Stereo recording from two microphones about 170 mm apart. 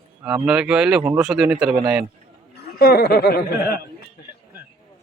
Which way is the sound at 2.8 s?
65° left (ahead or behind).